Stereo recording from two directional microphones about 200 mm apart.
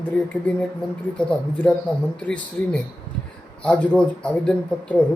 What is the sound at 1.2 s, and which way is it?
Speech, 5° left (ahead or behind).